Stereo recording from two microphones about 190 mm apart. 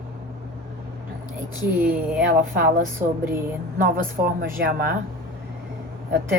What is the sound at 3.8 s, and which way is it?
Speech, 50° right (ahead or behind).